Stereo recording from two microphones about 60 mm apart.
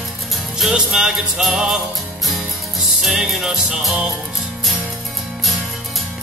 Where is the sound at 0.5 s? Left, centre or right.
Centre.